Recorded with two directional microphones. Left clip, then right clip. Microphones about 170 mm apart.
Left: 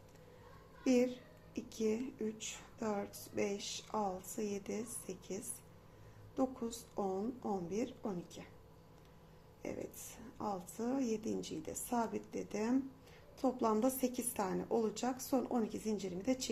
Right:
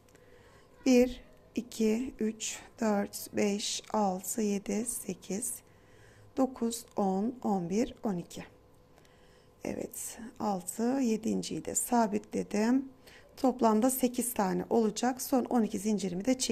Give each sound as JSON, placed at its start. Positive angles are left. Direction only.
{"t": 0.9, "sound": "a woman's voice", "side_deg": -55}
{"t": 9.6, "sound": "a woman's voice", "side_deg": -60}